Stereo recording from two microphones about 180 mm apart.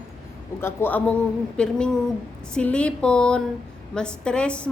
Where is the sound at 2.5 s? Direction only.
5° left (ahead or behind).